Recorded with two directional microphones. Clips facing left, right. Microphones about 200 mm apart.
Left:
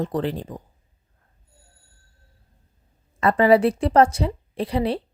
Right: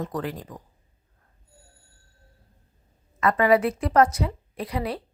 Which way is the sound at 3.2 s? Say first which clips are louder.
Left 4 dB; 30° left (ahead or behind).